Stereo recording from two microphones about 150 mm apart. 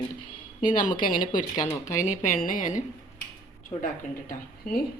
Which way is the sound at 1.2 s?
30° left (ahead or behind).